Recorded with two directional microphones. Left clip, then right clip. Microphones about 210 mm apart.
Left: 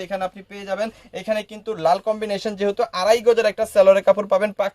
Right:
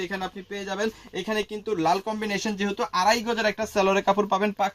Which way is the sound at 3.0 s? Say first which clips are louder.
Left 9 dB; 50° left (ahead or behind).